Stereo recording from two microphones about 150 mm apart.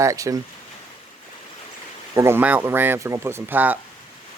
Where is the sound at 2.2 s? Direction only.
15° right (ahead or behind).